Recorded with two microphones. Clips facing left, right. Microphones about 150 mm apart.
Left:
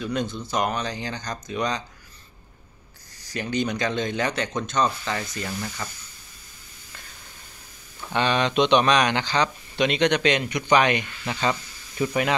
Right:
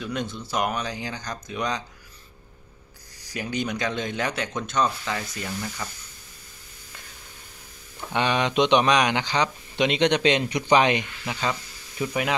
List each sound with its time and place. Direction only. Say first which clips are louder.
0.0 s speech: left 3 dB; centre (ahead or behind)
3.3 s speech: left 2 dB; 5° right (ahead or behind)
8.1 s speech: left 1 dB; 15° right (ahead or behind)
12.0 s speech: left 2 dB; 5° right (ahead or behind)